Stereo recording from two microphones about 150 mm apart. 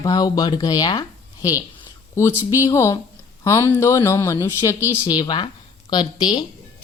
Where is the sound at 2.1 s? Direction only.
20° left (ahead or behind).